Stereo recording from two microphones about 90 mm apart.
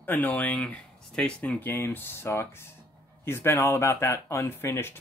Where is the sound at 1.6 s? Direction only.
25° left (ahead or behind).